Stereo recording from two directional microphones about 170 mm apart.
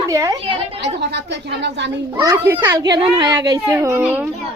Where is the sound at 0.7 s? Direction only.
75° right (ahead or behind).